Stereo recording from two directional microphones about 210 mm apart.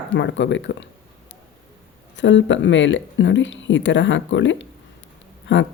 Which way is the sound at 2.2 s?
60° left (ahead or behind).